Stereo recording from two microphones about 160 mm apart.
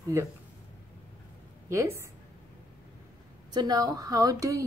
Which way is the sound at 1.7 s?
20° right (ahead or behind).